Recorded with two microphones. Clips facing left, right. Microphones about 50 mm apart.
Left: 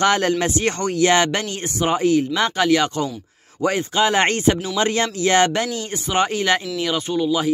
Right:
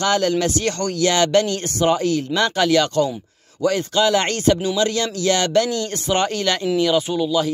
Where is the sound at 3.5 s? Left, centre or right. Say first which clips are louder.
Right 1 dB; left.